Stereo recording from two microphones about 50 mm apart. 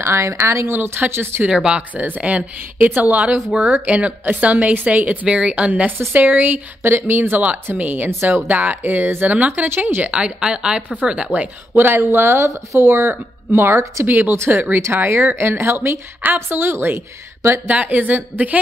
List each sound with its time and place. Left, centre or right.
0.0 s speech: right
0.7 s speech: right
1.5 s a woman's voice: centre
1.8 s a woman's voice: right
6.8 s speech: right
10.0 s a woman's voice: right
11.7 s speech: right
12.3 s speech: right
14.0 s speech: right
17.6 s speech: right